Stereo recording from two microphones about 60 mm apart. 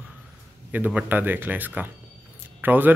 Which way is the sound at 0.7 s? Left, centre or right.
Right.